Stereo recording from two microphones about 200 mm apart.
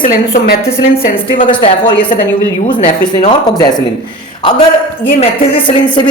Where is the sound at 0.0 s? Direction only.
45° left (ahead or behind).